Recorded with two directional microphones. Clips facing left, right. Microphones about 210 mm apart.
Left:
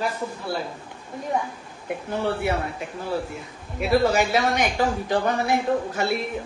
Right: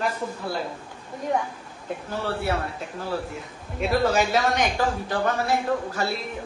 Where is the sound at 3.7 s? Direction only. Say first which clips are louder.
Left 2 dB; 10° left (ahead or behind).